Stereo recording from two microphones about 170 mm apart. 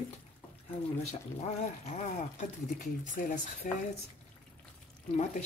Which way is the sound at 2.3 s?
45° left (ahead or behind).